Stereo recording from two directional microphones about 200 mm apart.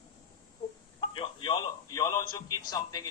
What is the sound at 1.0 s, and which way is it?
A man's voice, 25° left (ahead or behind).